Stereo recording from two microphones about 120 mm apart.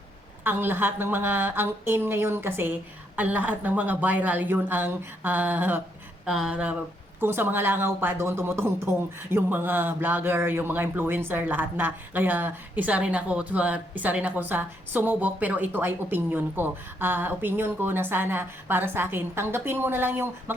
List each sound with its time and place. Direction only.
0.4 s speech: 15° right (ahead or behind)
6.2 s speech: 5° right (ahead or behind)